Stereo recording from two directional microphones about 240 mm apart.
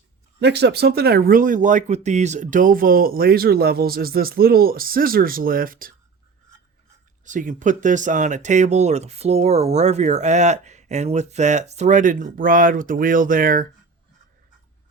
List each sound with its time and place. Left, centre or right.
0.3 s speech: right
7.3 s speech: right